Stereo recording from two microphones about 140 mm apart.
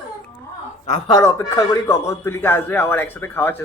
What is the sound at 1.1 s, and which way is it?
A man's voice, 20° left (ahead or behind).